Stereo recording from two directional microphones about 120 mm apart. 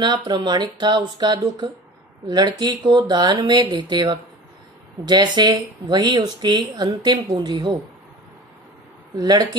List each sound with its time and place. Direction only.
0.0 s speech: 40° right (ahead or behind)
9.1 s speech: 35° right (ahead or behind)